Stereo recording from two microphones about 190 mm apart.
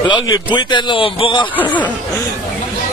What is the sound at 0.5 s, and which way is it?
Speech, 25° left (ahead or behind).